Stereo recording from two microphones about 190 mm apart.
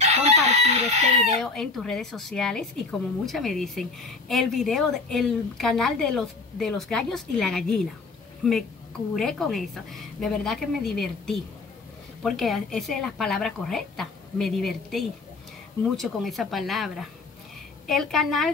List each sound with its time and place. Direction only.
0.0 s chicken: 35° right (ahead or behind)
1.2 s a woman's voice: centre (ahead or behind)